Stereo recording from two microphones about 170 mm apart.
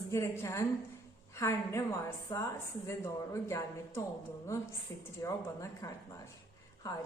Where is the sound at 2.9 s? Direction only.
15° left (ahead or behind).